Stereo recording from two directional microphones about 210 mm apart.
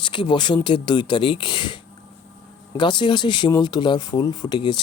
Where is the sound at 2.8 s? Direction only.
20° left (ahead or behind).